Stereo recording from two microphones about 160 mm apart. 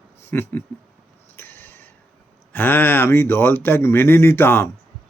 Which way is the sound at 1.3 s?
15° left (ahead or behind).